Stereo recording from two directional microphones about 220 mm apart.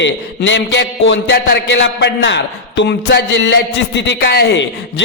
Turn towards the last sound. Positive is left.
turn(degrees=50)  # may be behind; listen again after turning